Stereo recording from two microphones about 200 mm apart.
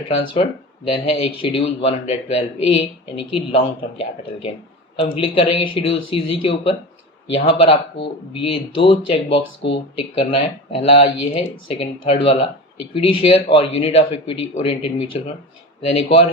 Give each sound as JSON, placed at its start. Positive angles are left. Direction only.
{"t": 0.9, "sound": "speech", "side_deg": 30}